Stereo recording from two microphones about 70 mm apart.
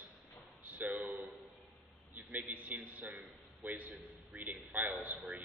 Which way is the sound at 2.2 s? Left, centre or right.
Right.